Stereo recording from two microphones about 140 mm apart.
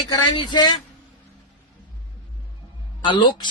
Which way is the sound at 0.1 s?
30° left (ahead or behind).